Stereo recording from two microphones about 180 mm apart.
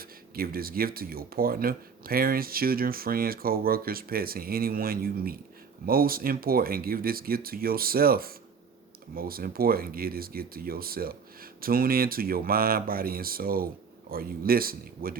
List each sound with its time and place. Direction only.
0.0 s speech: 55° right (ahead or behind)